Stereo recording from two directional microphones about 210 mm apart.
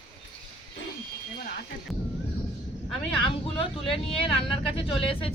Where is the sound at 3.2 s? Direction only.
25° left (ahead or behind).